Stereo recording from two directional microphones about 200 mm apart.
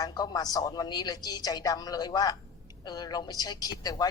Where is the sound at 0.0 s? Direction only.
20° left (ahead or behind).